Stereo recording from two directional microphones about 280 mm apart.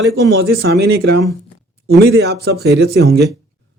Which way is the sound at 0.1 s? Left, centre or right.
Right.